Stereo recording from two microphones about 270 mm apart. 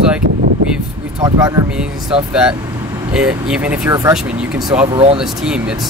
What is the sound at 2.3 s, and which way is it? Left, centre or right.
Speech, centre.